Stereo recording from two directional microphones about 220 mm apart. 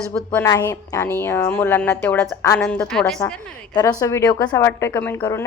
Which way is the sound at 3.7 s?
20° left (ahead or behind).